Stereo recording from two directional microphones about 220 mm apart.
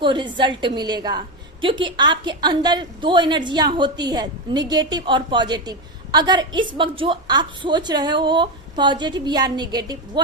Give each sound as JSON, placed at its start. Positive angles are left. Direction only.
{"t": 0.0, "sound": "a woman's voice", "side_deg": -20}